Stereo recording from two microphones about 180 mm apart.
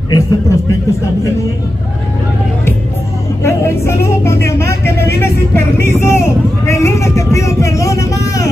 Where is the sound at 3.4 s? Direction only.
15° left (ahead or behind).